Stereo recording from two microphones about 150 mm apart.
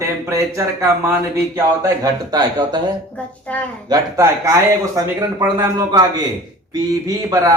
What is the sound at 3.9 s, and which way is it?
Speech, 25° right (ahead or behind).